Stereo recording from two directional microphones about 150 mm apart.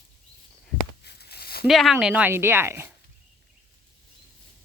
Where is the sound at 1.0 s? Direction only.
90° left.